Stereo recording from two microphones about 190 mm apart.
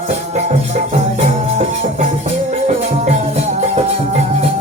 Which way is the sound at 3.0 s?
35° right (ahead or behind).